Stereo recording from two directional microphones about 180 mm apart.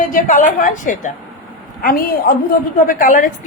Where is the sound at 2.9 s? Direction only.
50° left (ahead or behind).